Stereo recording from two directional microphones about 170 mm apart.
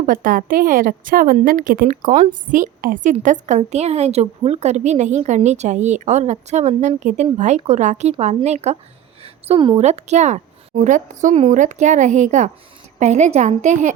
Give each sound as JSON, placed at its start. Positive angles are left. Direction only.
{"t": 0.0, "sound": "a woman's voice", "side_deg": -50}
{"t": 9.2, "sound": "a sound", "side_deg": -30}
{"t": 9.8, "sound": "a woman's voice", "side_deg": -40}